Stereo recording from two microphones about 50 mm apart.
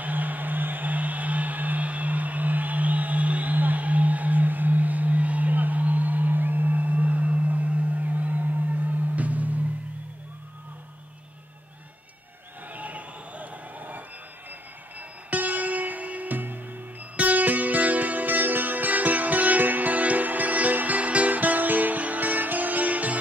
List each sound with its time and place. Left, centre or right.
0.0 s music: right
12.7 s a sound: right
15.0 s music: right